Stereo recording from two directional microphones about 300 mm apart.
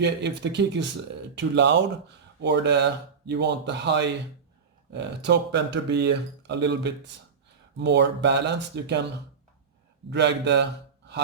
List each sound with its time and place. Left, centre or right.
0.0 s speech: right
10.1 s a man's voice: right